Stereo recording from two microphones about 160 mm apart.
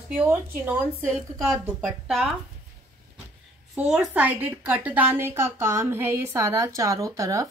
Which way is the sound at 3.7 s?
5° right (ahead or behind).